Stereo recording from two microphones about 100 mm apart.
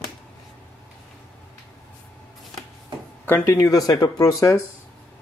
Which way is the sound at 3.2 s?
25° left (ahead or behind).